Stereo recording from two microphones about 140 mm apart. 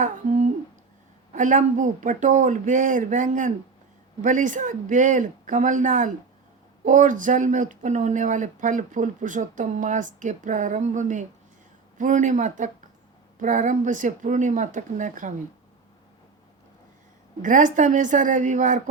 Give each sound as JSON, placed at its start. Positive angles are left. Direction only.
{"t": 0.0, "sound": "a sound", "side_deg": -55}
{"t": 1.3, "sound": "speech", "side_deg": -65}
{"t": 17.4, "sound": "speech", "side_deg": -65}